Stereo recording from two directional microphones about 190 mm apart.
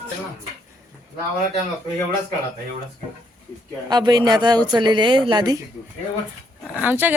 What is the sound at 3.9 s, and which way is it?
A woman's voice, 20° right (ahead or behind).